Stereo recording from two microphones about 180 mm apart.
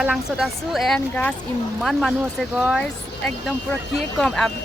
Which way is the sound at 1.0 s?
10° left (ahead or behind).